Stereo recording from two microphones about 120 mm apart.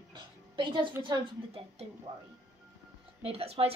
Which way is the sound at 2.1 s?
50° right (ahead or behind).